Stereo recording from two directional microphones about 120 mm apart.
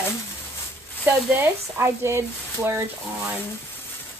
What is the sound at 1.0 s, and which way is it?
Speech, 15° right (ahead or behind).